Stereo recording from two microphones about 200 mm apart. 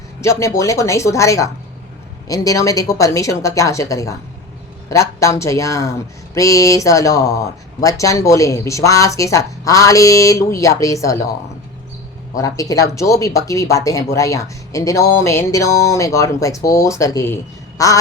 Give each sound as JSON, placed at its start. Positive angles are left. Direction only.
{"t": 0.2, "sound": "speech", "side_deg": 15}
{"t": 12.4, "sound": "speech", "side_deg": 15}